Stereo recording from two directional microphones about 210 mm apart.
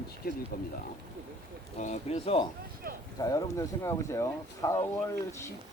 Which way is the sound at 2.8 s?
45° right (ahead or behind).